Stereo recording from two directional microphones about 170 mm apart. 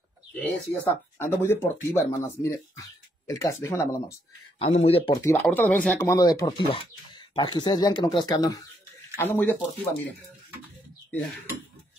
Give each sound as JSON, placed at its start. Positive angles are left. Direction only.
{"t": 0.4, "sound": "speech", "side_deg": 10}
{"t": 4.6, "sound": "speech", "side_deg": 35}
{"t": 5.1, "sound": "speech", "side_deg": 20}